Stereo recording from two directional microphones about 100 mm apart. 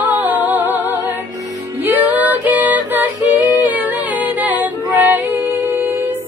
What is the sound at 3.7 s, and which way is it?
Female singing, 15° right (ahead or behind).